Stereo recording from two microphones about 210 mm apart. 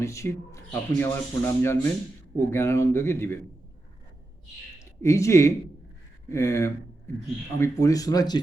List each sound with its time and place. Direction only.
0.0 s speech: 15° left (ahead or behind)
4.9 s speech: 15° left (ahead or behind)